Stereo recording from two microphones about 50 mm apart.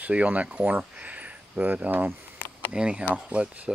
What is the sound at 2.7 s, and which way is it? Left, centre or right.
Speech, right.